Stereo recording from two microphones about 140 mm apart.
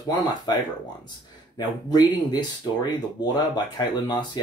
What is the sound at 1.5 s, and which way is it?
Speech, 30° left (ahead or behind).